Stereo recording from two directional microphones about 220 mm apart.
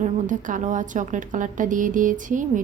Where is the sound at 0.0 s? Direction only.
35° right (ahead or behind).